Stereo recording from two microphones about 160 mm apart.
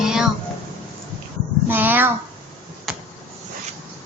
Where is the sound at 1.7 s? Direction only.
10° right (ahead or behind).